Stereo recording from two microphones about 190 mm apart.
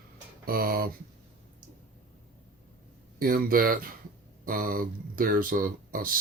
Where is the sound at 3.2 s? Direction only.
50° right (ahead or behind).